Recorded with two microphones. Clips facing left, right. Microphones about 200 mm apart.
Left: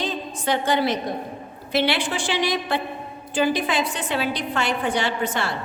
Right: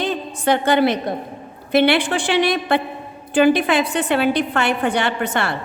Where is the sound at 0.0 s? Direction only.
60° right (ahead or behind).